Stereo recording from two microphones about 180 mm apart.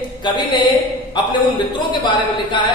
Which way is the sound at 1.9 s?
25° left (ahead or behind).